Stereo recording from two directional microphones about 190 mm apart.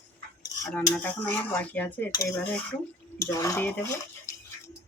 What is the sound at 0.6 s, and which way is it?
Speech, 10° left (ahead or behind).